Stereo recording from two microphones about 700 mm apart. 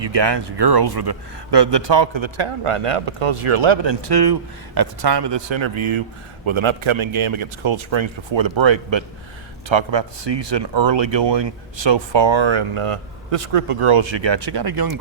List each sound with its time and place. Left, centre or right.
0.0 s speech: right